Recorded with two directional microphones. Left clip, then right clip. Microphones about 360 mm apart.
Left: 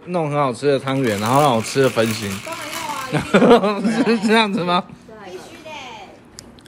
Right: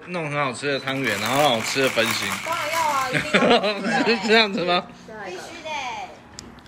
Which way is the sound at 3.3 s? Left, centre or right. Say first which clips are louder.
Left 6 dB; centre.